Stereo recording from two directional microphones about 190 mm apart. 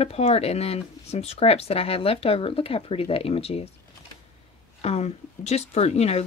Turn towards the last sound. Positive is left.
turn(degrees=35)  # may be behind; listen again after turning